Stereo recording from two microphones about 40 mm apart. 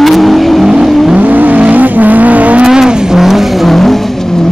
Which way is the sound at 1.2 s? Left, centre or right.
Right.